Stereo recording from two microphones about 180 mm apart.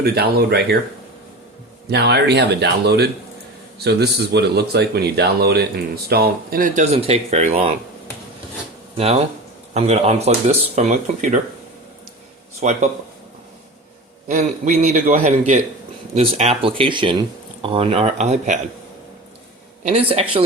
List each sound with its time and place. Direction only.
0.0 s speech: 60° right (ahead or behind)
1.9 s speech: 65° right (ahead or behind)
6.9 s speech: 35° right (ahead or behind)
9.7 s speech: 35° right (ahead or behind)
12.5 s speech: 40° right (ahead or behind)
14.3 s speech: 45° right (ahead or behind)
19.8 s speech: 30° right (ahead or behind)